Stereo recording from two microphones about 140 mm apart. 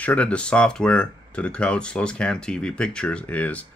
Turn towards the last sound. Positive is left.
turn(degrees=10)  # may be behind; listen again after turning